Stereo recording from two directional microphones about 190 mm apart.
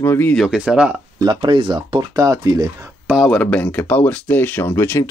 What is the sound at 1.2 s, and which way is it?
Speech, 20° right (ahead or behind).